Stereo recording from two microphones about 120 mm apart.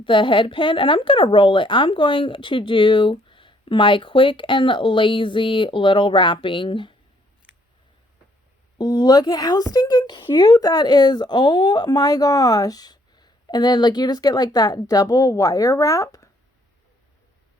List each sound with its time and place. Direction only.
0.0 s a woman's voice: 45° left (ahead or behind)
8.8 s a woman's voice: 35° left (ahead or behind)
10.4 s a woman's voice: 30° left (ahead or behind)